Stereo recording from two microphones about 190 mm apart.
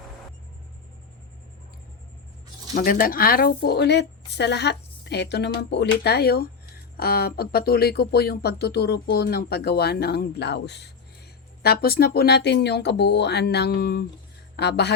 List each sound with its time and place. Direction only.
2.7 s speech: 45° left (ahead or behind)